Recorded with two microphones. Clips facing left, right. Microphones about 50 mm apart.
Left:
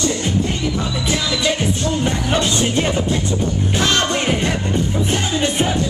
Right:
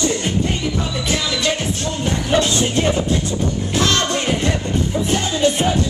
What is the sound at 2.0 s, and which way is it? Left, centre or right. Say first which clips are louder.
Music: right 5 dB; centre.